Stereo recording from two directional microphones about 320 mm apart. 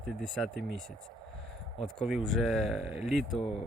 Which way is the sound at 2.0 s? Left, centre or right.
Centre.